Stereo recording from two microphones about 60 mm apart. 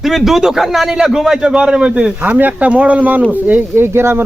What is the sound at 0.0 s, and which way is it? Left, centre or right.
A man's voice, centre.